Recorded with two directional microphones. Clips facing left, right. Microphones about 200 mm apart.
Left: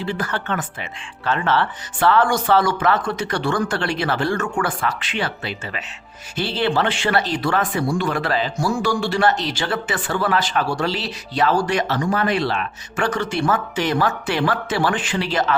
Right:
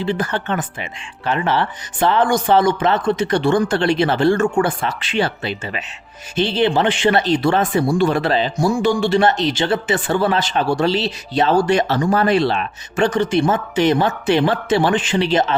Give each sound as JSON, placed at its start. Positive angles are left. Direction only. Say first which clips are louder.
{"t": 0.0, "sound": "speech", "louder": "right 4 dB", "side_deg": -20}